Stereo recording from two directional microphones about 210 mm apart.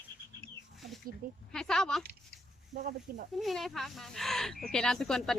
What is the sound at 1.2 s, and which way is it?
Speech, 40° right (ahead or behind).